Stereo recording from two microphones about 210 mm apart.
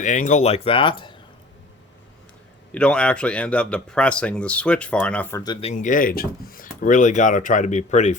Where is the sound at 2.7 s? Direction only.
5° left (ahead or behind); by 5.7 s 20° left (ahead or behind).